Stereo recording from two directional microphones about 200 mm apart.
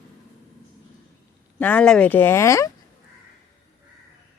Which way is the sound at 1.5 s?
10° left (ahead or behind).